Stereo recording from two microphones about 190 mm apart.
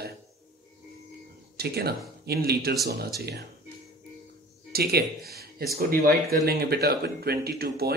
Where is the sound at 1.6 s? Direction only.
55° right (ahead or behind).